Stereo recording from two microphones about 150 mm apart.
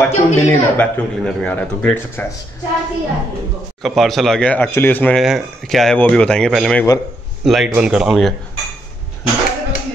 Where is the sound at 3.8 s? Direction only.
Centre (ahead or behind).